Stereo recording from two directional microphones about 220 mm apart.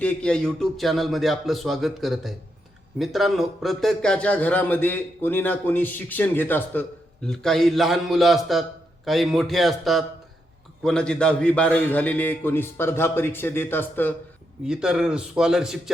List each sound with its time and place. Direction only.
0.0 s a man's voice: 5° left (ahead or behind)
14.6 s a man's voice: 5° right (ahead or behind)